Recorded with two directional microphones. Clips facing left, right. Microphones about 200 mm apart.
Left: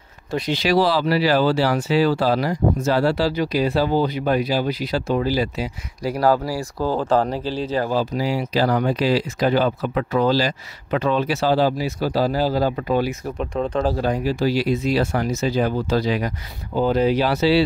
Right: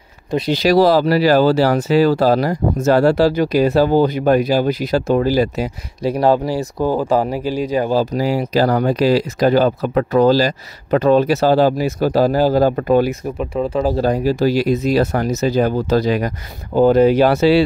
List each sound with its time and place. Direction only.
0.5 s speech: 40° right (ahead or behind)
6.0 s speech: 25° right (ahead or behind)
7.9 s speech: 40° right (ahead or behind)
13.4 s speech: 5° right (ahead or behind)
13.9 s speech: 40° right (ahead or behind)